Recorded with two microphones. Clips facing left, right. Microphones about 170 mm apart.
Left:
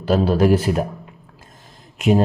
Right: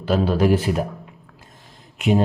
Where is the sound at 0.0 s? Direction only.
40° left (ahead or behind).